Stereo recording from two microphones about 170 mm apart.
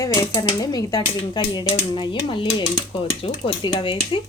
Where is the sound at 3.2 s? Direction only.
35° left (ahead or behind).